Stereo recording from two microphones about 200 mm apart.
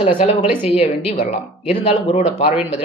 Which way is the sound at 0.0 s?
35° left (ahead or behind).